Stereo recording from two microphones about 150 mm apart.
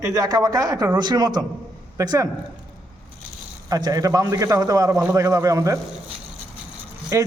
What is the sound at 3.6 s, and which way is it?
A man's voice, 25° right (ahead or behind).